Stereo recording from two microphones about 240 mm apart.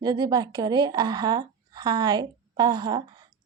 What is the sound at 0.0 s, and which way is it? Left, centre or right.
A woman's voice, centre.